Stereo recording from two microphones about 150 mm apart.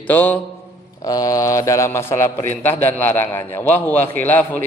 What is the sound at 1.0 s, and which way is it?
A man's voice, 25° left (ahead or behind).